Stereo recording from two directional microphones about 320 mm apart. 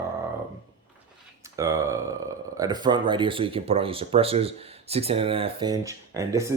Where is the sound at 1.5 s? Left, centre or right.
Centre.